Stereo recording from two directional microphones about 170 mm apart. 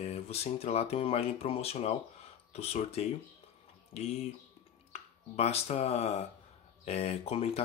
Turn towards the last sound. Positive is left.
turn(degrees=35)  # may be behind; listen again after turning